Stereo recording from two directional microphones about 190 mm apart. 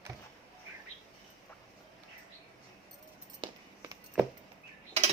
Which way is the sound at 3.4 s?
25° right (ahead or behind).